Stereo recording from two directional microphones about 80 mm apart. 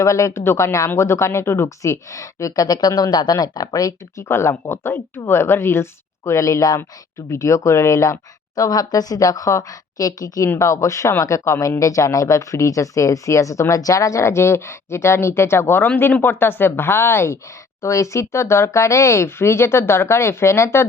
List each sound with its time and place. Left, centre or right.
0.0 s speech: left
4.3 s speech: left